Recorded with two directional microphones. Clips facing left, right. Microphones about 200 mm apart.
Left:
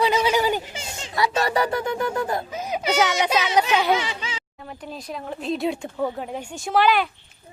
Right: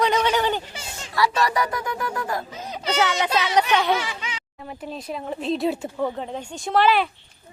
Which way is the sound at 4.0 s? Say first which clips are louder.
Left 1 dB; 25° left (ahead or behind).